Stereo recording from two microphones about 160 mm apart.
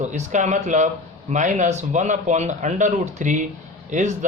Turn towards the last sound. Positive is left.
turn(degrees=-50)  # may be behind; listen again after turning